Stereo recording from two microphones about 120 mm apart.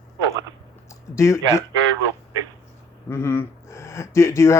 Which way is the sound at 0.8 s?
25° left (ahead or behind).